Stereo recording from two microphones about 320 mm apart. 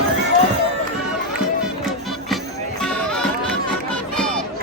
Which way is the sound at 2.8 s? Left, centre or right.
Centre.